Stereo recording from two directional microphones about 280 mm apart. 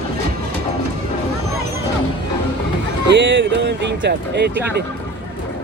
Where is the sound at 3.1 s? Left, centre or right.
Right.